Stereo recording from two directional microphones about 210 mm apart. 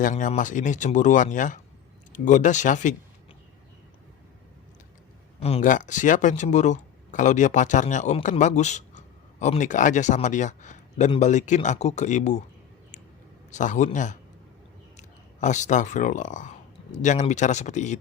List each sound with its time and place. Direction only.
0.0 s speech: 35° left (ahead or behind)
5.4 s speech: 30° left (ahead or behind)
13.5 s speech: 35° left (ahead or behind)